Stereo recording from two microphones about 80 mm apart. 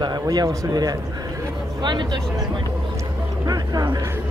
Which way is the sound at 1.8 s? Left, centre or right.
Right.